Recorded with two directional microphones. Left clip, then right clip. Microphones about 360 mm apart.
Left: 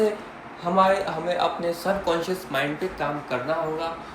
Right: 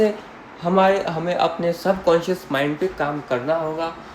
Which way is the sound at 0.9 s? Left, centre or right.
Centre.